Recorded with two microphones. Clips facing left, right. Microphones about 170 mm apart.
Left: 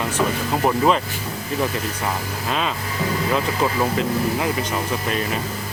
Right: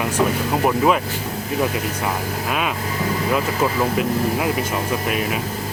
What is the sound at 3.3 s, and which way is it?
Speech, 5° right (ahead or behind).